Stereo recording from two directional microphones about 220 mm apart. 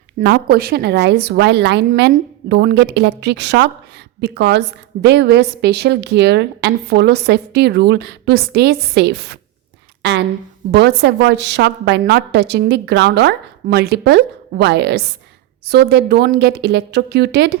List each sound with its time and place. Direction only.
0.2 s a woman's voice: 45° right (ahead or behind)